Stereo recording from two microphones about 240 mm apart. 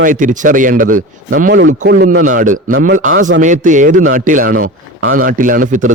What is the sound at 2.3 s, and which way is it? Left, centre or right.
A man's voice, right.